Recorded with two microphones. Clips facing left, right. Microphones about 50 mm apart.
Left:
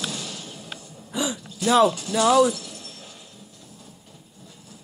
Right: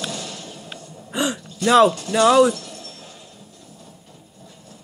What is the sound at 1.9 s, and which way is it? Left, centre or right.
Speech, right.